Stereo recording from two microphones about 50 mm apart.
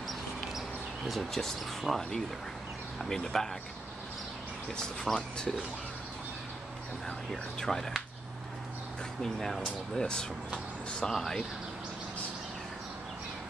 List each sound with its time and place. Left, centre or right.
0.6 s speech: centre
4.7 s speech: centre
7.2 s speech: centre
9.2 s speech: centre